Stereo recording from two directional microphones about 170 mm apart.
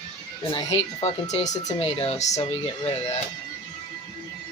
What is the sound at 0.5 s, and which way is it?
Speech, 40° left (ahead or behind).